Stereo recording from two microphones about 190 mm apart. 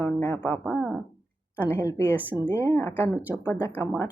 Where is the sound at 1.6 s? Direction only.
10° left (ahead or behind).